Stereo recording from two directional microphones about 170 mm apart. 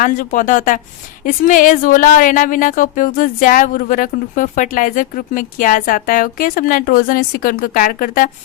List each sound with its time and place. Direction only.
0.0 s a woman's voice: 50° left (ahead or behind)